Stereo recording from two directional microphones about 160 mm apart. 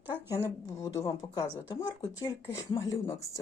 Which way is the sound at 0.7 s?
20° left (ahead or behind).